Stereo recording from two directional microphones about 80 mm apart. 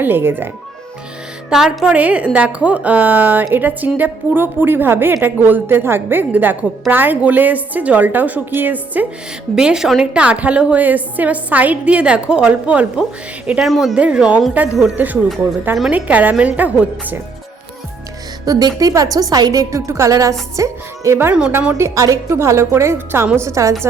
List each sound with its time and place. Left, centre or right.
0.0 s a woman's voice: right
1.5 s a woman's voice: centre
9.6 s a woman's voice: centre
13.6 s a woman's voice: centre
13.9 s a woman's voice: centre
18.4 s a woman's voice: right
23.5 s a woman's voice: right